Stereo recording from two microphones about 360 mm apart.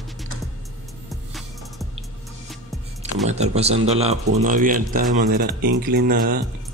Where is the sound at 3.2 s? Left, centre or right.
Centre.